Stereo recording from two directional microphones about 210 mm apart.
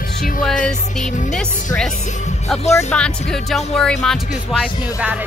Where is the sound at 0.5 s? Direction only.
35° left (ahead or behind).